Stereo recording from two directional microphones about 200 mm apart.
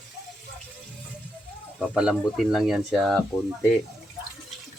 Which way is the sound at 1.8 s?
5° right (ahead or behind).